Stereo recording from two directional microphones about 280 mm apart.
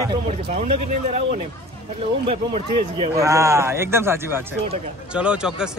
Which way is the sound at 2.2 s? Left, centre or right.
Centre.